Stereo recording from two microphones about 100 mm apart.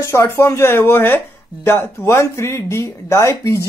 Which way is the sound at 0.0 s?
25° left (ahead or behind).